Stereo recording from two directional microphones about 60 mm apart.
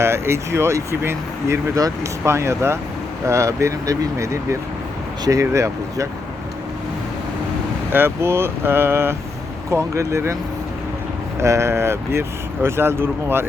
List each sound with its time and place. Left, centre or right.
0.0 s speech: right
7.9 s speech: right
9.6 s speech: right
11.3 s speech: right